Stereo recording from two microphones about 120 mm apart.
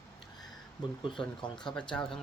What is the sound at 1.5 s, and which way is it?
Speech, 5° left (ahead or behind).